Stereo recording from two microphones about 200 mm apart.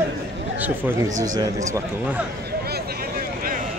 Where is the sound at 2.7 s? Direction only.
45° right (ahead or behind).